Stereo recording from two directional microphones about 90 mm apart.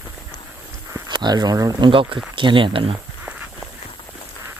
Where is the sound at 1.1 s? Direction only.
55° right (ahead or behind).